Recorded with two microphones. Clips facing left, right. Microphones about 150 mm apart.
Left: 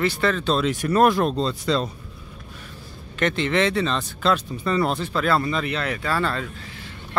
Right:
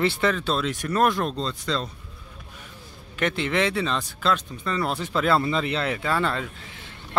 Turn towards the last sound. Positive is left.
turn(degrees=-20)  # may be behind; listen again after turning